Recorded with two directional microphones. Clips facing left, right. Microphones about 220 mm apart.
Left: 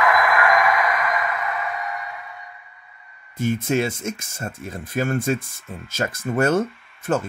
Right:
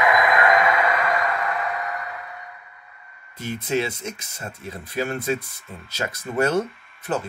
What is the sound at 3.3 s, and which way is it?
Speech, 50° left (ahead or behind).